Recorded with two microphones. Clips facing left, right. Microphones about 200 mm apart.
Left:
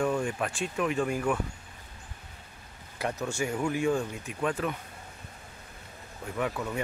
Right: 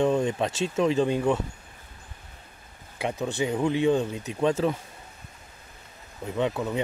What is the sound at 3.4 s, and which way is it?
Speech, 20° right (ahead or behind).